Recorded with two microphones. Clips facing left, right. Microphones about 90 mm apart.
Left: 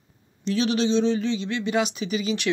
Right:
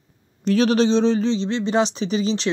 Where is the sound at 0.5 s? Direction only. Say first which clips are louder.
Right 5 dB; 45° right (ahead or behind).